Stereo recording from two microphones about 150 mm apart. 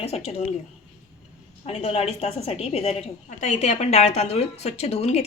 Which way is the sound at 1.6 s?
40° left (ahead or behind).